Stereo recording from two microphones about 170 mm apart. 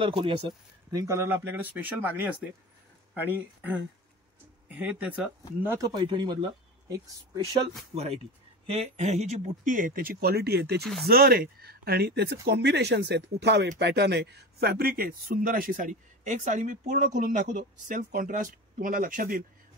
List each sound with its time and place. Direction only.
0.0 s speech: 30° right (ahead or behind)
8.6 s speech: 40° right (ahead or behind); by 10.8 s 75° right (ahead or behind)
10.8 s speech: centre (ahead or behind)
11.1 s speech: 65° right (ahead or behind)